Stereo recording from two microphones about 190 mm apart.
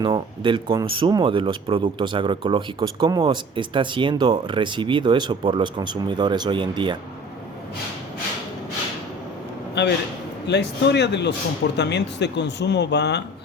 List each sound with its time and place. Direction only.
0.0 s speech: 25° right (ahead or behind)
9.8 s speech: 65° left (ahead or behind)